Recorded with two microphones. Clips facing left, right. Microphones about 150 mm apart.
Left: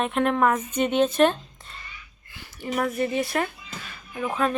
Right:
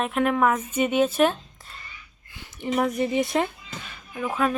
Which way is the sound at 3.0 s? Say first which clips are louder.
Right 2 dB; 20° right (ahead or behind).